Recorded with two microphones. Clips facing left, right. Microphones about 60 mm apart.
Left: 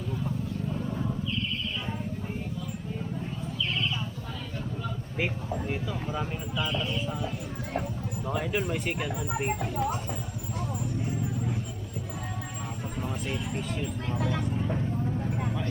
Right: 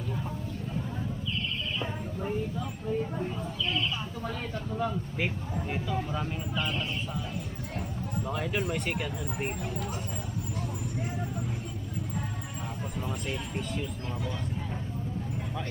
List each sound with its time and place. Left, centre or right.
5.1 s a sound: centre
8.3 s speech: centre
13.0 s speech: centre
14.2 s speech: left